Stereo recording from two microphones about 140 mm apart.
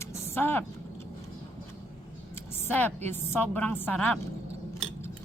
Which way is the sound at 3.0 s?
15° left (ahead or behind).